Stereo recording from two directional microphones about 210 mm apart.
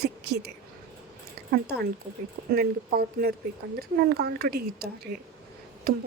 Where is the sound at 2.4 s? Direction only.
45° right (ahead or behind).